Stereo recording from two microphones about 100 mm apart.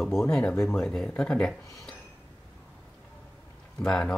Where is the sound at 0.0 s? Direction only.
Centre (ahead or behind).